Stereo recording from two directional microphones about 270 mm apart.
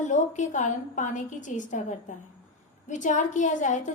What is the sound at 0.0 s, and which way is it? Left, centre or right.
A woman's voice, left.